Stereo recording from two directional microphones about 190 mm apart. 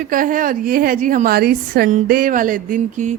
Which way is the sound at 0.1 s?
45° right (ahead or behind).